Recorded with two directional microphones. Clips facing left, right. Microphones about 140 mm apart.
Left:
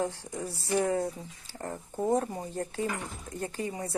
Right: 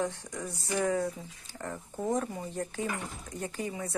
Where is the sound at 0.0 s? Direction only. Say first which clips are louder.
Left 1 dB; 30° left (ahead or behind).